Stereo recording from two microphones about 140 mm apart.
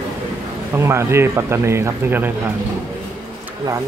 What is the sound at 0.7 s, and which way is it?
Speech, 20° right (ahead or behind).